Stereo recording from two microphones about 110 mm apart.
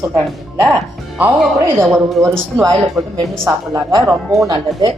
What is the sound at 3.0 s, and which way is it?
Speech, 10° right (ahead or behind).